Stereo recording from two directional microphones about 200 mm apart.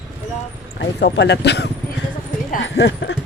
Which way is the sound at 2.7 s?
60° left (ahead or behind).